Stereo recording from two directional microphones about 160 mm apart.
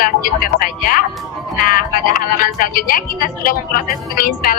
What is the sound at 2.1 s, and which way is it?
Speech, 60° left (ahead or behind).